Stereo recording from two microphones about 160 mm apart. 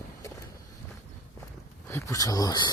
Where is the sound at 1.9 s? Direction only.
20° left (ahead or behind).